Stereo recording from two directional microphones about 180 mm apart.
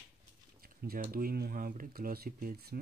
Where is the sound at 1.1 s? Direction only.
55° right (ahead or behind).